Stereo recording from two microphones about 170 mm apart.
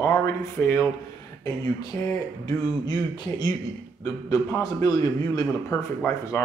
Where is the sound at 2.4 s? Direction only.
25° left (ahead or behind).